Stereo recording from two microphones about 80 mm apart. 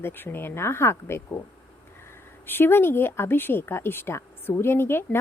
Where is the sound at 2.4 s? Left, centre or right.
Left.